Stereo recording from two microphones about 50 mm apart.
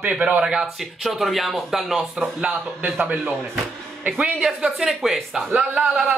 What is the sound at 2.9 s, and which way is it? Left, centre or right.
Speech, right.